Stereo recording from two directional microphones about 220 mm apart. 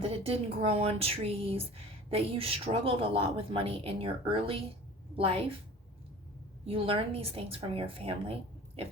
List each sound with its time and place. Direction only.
0.0 s speech: 25° right (ahead or behind)
6.7 s speech: 25° right (ahead or behind)